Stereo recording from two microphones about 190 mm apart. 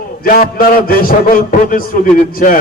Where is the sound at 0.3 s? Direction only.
50° left (ahead or behind).